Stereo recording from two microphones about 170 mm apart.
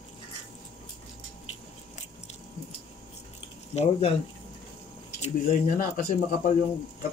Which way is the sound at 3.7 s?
40° left (ahead or behind).